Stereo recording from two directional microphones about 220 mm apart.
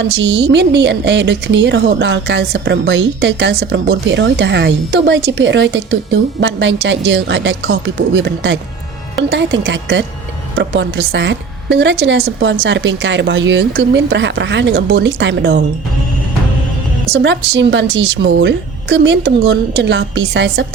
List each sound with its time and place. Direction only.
0.0 s a woman's voice: 55° right (ahead or behind)
17.1 s a woman's voice: 50° right (ahead or behind)